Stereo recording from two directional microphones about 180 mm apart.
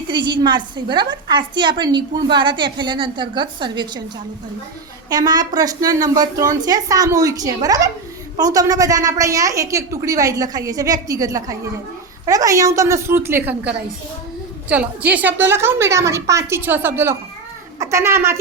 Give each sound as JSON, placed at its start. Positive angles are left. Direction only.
{"t": 0.1, "sound": "a woman's voice", "side_deg": -25}
{"t": 5.0, "sound": "a woman's voice", "side_deg": -20}